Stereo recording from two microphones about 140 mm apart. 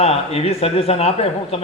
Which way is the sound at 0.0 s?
45° left (ahead or behind).